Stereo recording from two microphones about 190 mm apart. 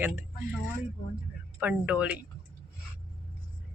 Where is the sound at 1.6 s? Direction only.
5° right (ahead or behind).